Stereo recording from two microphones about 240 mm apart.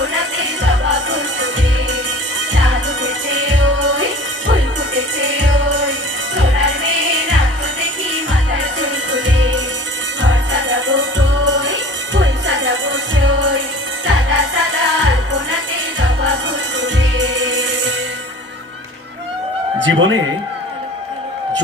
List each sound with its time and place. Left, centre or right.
0.0 s music: right
2.5 s music: right
8.1 s music: right
16.8 s music: right
19.9 s speech: right